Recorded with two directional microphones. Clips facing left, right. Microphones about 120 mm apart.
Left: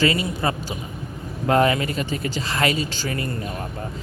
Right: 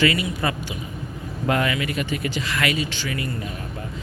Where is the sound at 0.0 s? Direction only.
30° left (ahead or behind).